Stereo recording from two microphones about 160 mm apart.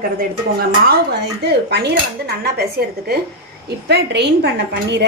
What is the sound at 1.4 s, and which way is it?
Speech, 90° right.